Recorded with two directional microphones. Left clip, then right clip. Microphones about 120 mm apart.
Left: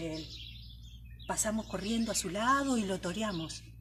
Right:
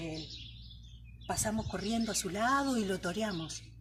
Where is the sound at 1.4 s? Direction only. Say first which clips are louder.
Left 1 dB; 15° left (ahead or behind).